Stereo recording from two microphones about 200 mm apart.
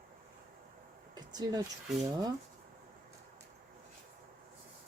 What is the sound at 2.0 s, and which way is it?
Speech, 20° right (ahead or behind).